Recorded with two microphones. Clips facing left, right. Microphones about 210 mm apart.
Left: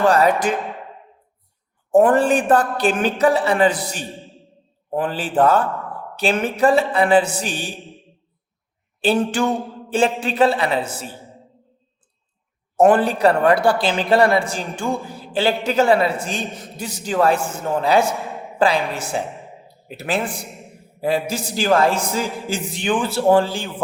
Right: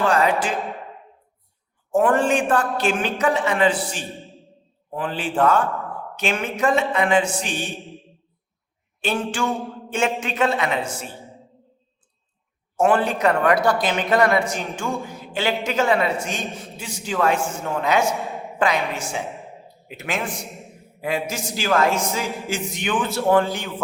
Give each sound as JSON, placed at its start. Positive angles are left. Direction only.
{"t": 0.1, "sound": "speech", "side_deg": 40}
{"t": 2.0, "sound": "speech", "side_deg": 35}
{"t": 4.2, "sound": "a sound", "side_deg": 0}
{"t": 4.9, "sound": "speech", "side_deg": 40}
{"t": 9.0, "sound": "speech", "side_deg": 35}
{"t": 12.7, "sound": "speech", "side_deg": 35}
{"t": 18.2, "sound": "a sound", "side_deg": 0}
{"t": 18.6, "sound": "speech", "side_deg": 35}
{"t": 19.2, "sound": "a sound", "side_deg": 0}
{"t": 19.9, "sound": "speech", "side_deg": 35}
{"t": 20.4, "sound": "a man's voice", "side_deg": 0}
{"t": 21.2, "sound": "a man's voice", "side_deg": 35}